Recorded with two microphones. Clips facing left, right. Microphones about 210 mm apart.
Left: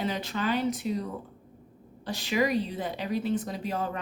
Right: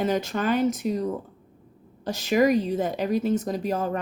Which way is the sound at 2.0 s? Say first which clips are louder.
Right 7 dB; 45° right (ahead or behind).